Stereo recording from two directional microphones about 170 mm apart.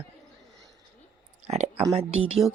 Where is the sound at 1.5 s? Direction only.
40° right (ahead or behind).